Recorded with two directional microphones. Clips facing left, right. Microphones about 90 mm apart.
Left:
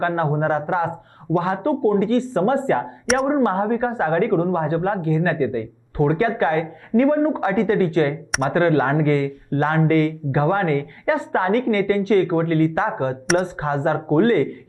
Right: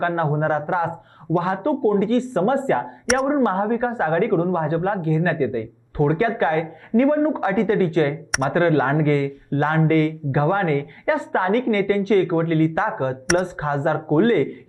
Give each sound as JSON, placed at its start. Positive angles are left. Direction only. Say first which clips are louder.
{"t": 0.0, "sound": "speech", "louder": "even", "side_deg": 25}